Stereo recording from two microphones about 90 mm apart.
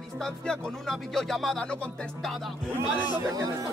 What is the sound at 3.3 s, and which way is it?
Speech, 35° right (ahead or behind).